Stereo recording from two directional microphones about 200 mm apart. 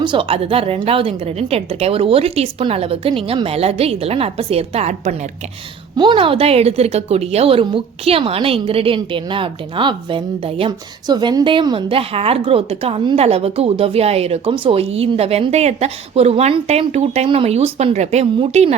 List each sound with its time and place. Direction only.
0.0 s a woman's voice: 25° right (ahead or behind)